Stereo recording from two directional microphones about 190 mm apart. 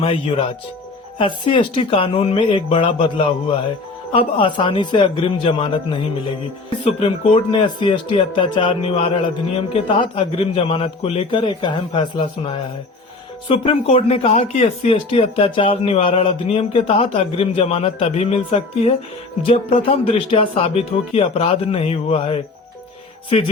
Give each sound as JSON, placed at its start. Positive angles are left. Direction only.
{"t": 0.0, "sound": "speech", "side_deg": 30}